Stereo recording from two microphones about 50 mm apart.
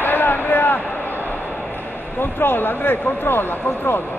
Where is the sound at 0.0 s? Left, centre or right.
Left.